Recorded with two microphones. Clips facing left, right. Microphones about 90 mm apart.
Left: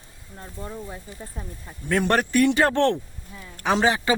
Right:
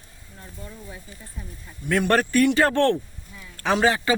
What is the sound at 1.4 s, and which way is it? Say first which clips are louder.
Speech: left 2 dB; 55° left (ahead or behind).